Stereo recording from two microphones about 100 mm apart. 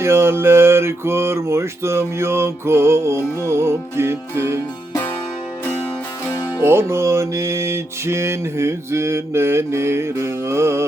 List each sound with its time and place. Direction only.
0.0 s mantra: 25° right (ahead or behind)
6.6 s mantra: 25° right (ahead or behind)